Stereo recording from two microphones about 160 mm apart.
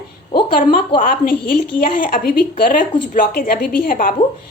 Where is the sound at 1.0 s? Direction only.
65° left (ahead or behind).